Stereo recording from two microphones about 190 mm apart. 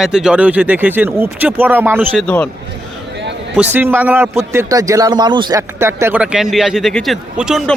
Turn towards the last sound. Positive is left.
turn(degrees=0)  # may be behind; listen again after turning